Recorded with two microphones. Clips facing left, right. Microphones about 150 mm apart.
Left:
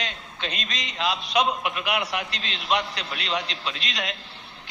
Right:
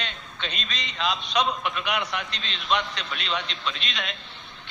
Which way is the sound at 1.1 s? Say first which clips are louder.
Left 3 dB; 15° left (ahead or behind).